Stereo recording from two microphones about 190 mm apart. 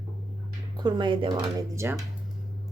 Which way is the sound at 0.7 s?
25° right (ahead or behind).